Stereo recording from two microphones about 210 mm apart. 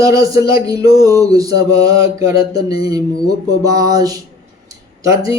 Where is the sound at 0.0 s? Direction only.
15° right (ahead or behind).